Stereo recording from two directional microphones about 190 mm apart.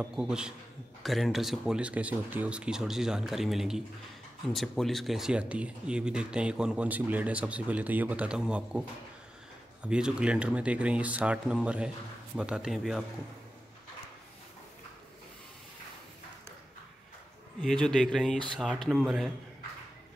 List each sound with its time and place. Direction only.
0.0 s speech: 5° right (ahead or behind)
9.8 s speech: 5° right (ahead or behind)
17.6 s speech: centre (ahead or behind)